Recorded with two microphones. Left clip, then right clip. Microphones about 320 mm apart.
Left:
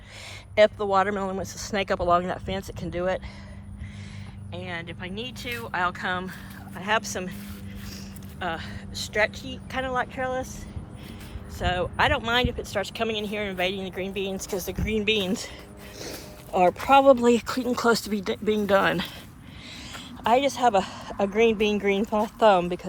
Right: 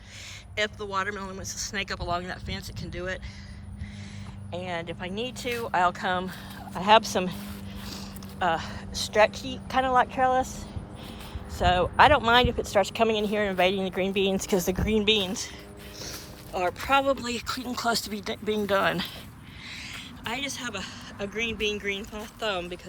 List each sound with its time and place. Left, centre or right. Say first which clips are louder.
0.5 s speech: left 9 dB; centre
4.5 s speech: right 2 dB; centre
11.6 s speech: right 4 dB; centre
14.8 s speech: left 2 dB; centre
17.0 s speech: left 9 dB; centre
20.2 s speech: left 12 dB; centre